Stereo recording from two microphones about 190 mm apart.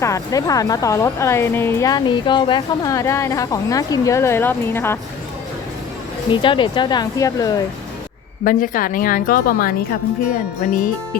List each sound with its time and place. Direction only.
0.0 s a woman's voice: 15° left (ahead or behind)
6.3 s speech: 25° left (ahead or behind)
8.4 s a woman's voice: 45° left (ahead or behind)